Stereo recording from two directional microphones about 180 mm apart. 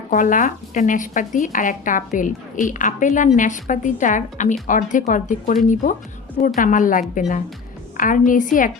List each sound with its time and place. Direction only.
0.1 s a woman's voice: 45° left (ahead or behind)